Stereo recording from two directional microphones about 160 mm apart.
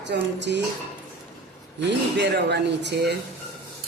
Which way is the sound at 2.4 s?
90° right.